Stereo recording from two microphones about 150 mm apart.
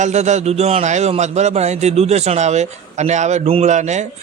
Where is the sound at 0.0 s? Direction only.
50° right (ahead or behind).